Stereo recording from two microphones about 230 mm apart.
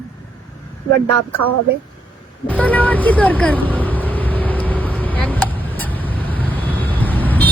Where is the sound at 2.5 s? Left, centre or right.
Centre.